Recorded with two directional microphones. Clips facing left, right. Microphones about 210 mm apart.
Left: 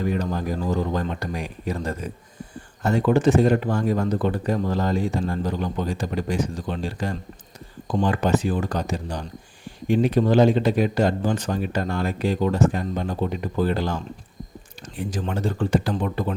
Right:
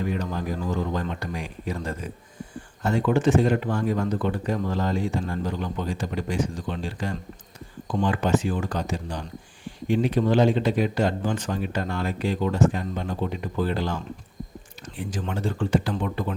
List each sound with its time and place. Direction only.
0.1 s speech: 40° left (ahead or behind)